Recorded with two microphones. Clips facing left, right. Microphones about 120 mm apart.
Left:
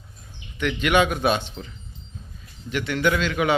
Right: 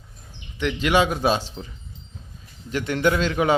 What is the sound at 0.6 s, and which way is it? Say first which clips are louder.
Speech: even; 25° right (ahead or behind).